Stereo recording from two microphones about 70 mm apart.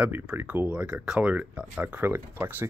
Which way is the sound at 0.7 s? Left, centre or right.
Centre.